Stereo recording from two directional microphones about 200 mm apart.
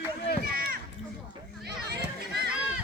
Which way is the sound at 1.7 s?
55° right (ahead or behind).